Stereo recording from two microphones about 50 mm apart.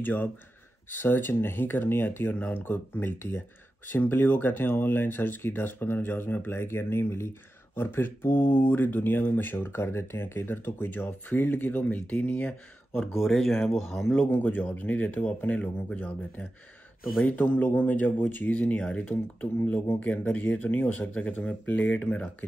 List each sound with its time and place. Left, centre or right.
0.0 s speech: left
14.2 s speech: left
18.8 s speech: left